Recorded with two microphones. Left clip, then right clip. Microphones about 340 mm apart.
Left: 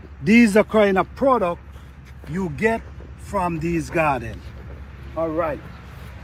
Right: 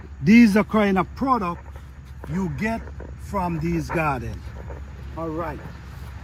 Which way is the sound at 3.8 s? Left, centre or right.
Centre.